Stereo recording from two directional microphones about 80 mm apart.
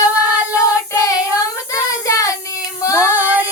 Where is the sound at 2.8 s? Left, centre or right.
Left.